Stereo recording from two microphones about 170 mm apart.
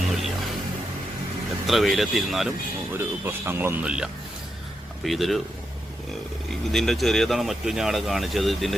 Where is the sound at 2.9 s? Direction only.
10° right (ahead or behind).